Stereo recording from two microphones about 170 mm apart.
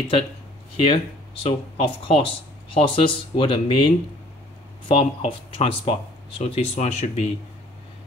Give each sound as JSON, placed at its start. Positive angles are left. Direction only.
{"t": 0.7, "sound": "speech", "side_deg": 35}